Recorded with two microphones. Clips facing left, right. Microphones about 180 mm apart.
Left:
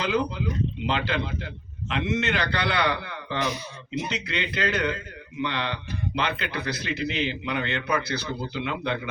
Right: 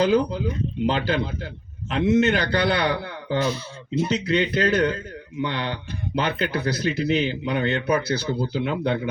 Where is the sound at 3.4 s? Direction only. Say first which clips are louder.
Right 4 dB; 15° left (ahead or behind).